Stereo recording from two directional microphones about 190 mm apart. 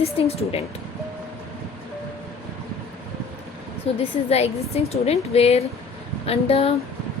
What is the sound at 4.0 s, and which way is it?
A woman's voice, 30° left (ahead or behind).